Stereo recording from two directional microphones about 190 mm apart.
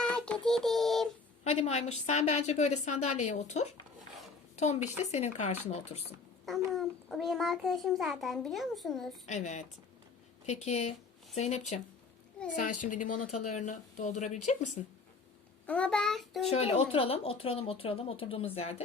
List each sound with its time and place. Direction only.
0.0 s a child's voice: 5° left (ahead or behind)
1.5 s a woman's voice: 35° left (ahead or behind)
6.7 s a child's voice: centre (ahead or behind)
9.2 s a woman's voice: 40° left (ahead or behind)
15.6 s a child's voice: 5° left (ahead or behind)
16.5 s speech: 35° left (ahead or behind)